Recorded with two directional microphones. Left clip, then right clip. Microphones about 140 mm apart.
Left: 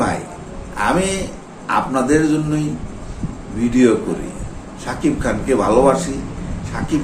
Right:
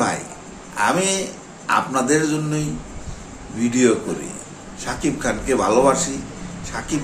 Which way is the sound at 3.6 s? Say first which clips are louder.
Left 2 dB; 20° right (ahead or behind).